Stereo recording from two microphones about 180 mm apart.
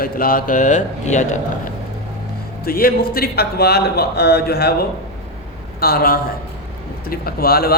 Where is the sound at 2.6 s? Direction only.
55° left (ahead or behind).